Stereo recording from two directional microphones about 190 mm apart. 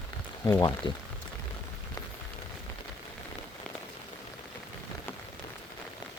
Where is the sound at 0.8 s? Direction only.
25° left (ahead or behind).